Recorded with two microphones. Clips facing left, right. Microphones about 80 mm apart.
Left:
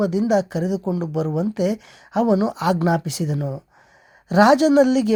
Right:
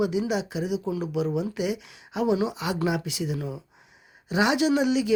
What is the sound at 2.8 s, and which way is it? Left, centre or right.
Speech, left.